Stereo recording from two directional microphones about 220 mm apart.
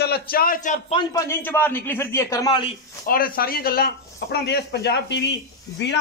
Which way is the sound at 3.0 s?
40° left (ahead or behind).